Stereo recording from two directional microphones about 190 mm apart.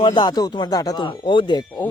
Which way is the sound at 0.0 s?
25° left (ahead or behind).